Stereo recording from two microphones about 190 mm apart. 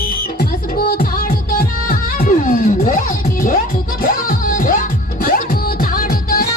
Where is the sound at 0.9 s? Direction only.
50° left (ahead or behind).